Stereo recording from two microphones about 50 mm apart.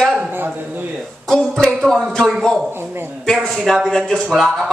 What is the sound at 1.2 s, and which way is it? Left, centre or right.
Speech, centre.